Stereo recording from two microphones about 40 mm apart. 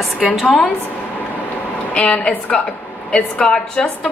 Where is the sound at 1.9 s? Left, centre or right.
Left.